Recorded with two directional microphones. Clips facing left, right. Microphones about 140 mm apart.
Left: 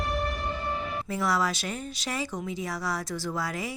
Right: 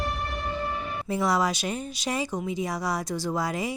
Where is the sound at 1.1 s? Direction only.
20° right (ahead or behind).